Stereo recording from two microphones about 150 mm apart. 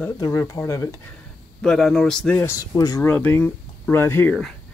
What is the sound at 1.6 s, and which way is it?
Speech, 5° left (ahead or behind).